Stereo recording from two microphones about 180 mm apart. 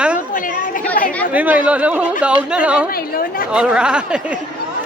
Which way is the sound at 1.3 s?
10° right (ahead or behind).